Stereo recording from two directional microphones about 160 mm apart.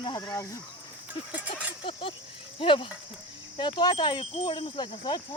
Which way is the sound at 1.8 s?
35° left (ahead or behind).